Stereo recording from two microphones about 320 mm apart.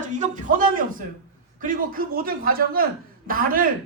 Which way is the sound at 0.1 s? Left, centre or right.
Right.